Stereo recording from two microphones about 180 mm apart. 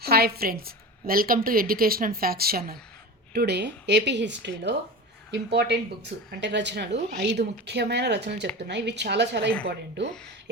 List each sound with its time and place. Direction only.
0.0 s a woman's voice: 60° right (ahead or behind)